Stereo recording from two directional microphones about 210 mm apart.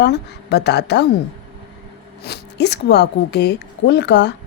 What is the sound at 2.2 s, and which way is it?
A woman's voice, 50° left (ahead or behind).